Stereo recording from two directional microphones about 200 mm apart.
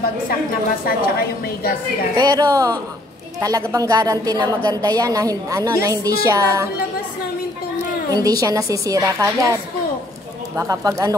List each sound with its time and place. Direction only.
0.8 s a woman's voice: 50° left (ahead or behind)
2.1 s a woman's voice: 20° right (ahead or behind)
8.1 s a woman's voice: 20° right (ahead or behind)